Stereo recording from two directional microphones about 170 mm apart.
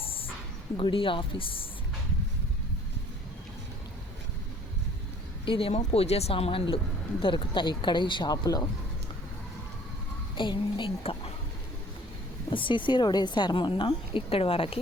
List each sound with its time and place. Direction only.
0.0 s a sound: 30° left (ahead or behind)
0.8 s speech: 30° left (ahead or behind)
5.5 s a woman's voice: 35° left (ahead or behind)
10.3 s a woman's voice: 30° left (ahead or behind)
12.5 s a woman's voice: 30° left (ahead or behind)